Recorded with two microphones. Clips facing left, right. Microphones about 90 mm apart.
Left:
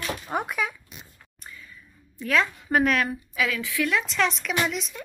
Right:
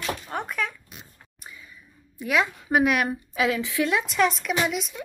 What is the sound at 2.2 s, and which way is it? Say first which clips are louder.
A woman's voice: even; 15° right (ahead or behind).